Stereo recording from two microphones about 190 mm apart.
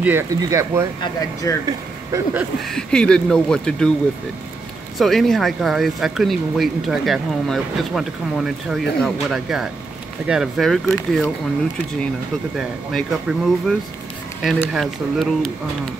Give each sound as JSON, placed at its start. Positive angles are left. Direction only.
{"t": 0.0, "sound": "speech", "side_deg": -15}
{"t": 1.0, "sound": "speech", "side_deg": 15}
{"t": 1.7, "sound": "speech", "side_deg": -15}
{"t": 2.6, "sound": "speech", "side_deg": 5}
{"t": 4.9, "sound": "speech", "side_deg": 0}
{"t": 12.5, "sound": "speech", "side_deg": 0}